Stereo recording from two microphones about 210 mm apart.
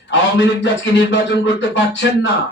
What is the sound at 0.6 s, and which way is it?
Music, 60° left (ahead or behind).